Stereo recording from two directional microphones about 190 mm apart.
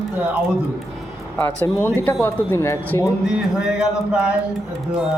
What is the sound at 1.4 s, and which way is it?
Speech, 10° left (ahead or behind).